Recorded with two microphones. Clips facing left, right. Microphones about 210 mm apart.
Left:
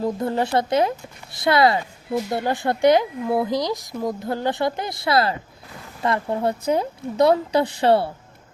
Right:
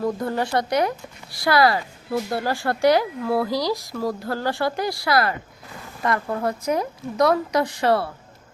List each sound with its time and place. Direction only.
0.0 s speech: 25° left (ahead or behind)